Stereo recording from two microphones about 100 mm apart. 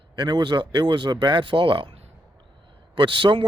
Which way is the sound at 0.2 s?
45° right (ahead or behind).